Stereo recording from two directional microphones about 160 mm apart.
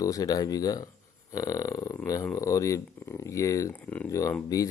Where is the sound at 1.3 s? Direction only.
20° left (ahead or behind).